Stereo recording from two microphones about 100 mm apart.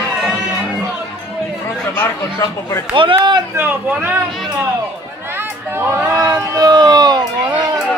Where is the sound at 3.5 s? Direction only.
20° right (ahead or behind).